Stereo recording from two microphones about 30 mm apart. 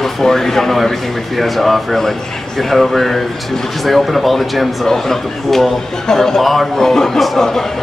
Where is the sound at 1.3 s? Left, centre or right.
Centre.